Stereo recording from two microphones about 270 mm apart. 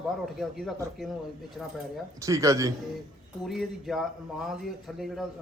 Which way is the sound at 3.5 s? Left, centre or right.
Centre.